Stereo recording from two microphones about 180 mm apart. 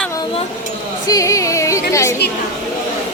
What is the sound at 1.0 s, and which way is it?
Music, 20° left (ahead or behind).